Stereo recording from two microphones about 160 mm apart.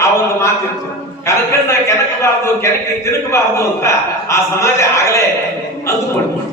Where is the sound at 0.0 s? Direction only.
15° left (ahead or behind).